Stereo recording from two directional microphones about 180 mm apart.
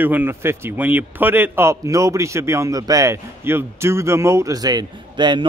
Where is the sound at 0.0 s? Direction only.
10° right (ahead or behind).